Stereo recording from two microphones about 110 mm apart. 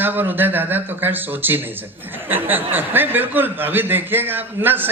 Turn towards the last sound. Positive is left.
turn(degrees=-20)  # may be behind; listen again after turning